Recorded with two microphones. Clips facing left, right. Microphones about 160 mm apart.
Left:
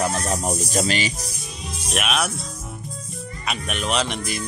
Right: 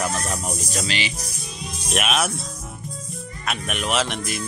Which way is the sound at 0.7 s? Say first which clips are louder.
Left 5 dB; 45° left (ahead or behind).